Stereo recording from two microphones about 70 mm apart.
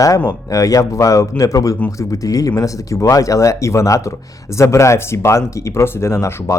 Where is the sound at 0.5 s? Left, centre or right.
Left.